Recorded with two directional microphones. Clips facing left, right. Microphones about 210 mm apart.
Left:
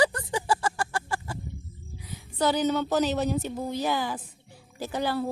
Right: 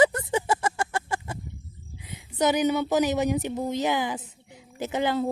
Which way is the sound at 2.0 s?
20° right (ahead or behind).